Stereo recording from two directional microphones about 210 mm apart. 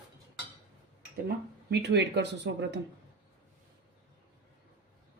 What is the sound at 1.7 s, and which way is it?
Speech, 55° right (ahead or behind).